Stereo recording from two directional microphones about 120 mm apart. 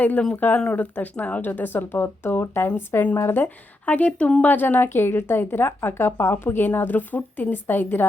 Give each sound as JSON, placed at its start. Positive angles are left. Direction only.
{"t": 0.0, "sound": "speech", "side_deg": 10}